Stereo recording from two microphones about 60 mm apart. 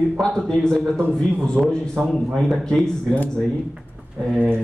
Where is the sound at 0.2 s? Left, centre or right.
Centre.